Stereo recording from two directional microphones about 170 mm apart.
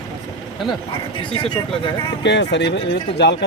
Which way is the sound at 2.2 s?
90° left.